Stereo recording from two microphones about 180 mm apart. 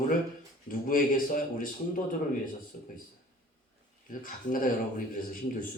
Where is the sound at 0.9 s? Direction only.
50° left (ahead or behind).